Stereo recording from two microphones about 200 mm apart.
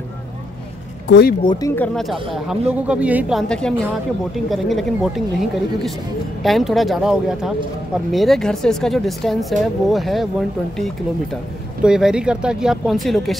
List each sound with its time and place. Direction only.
1.0 s speech: 55° left (ahead or behind)
1.4 s speech: 20° left (ahead or behind)
1.8 s speech: centre (ahead or behind)
11.8 s speech: 5° right (ahead or behind)